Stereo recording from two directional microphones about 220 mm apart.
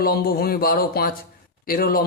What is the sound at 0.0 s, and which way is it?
Speech, 45° left (ahead or behind).